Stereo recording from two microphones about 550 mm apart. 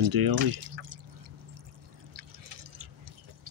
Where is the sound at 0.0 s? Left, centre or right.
Right.